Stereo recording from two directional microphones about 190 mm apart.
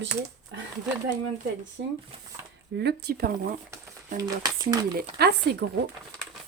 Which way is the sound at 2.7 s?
60° right (ahead or behind).